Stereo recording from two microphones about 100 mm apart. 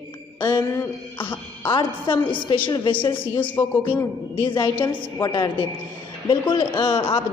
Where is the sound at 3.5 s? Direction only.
15° left (ahead or behind).